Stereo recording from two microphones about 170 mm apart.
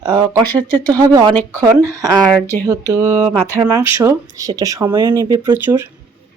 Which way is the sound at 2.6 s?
15° right (ahead or behind).